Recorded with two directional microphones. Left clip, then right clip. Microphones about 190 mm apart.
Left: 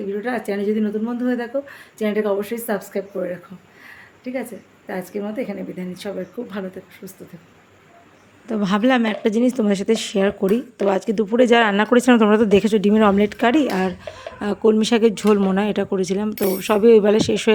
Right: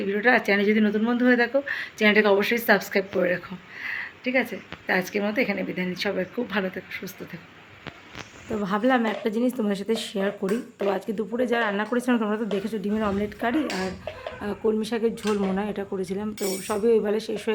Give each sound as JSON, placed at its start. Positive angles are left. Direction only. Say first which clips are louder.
{"t": 0.1, "sound": "speech", "louder": "right 5 dB", "side_deg": 10}
{"t": 3.8, "sound": "a sound", "louder": "right 6 dB", "side_deg": 10}
{"t": 4.9, "sound": "speech", "louder": "right 3 dB", "side_deg": 10}
{"t": 8.4, "sound": "speech", "louder": "left 5 dB", "side_deg": 35}